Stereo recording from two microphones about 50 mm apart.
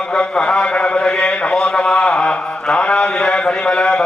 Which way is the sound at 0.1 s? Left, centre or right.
Left.